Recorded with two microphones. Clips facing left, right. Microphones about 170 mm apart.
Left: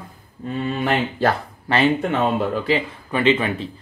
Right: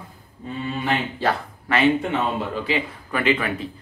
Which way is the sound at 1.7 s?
30° left (ahead or behind).